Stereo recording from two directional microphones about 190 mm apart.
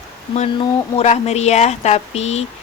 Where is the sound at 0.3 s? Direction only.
30° left (ahead or behind).